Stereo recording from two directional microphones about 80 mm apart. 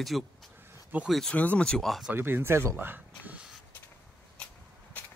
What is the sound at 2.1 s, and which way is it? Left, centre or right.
Speech, right.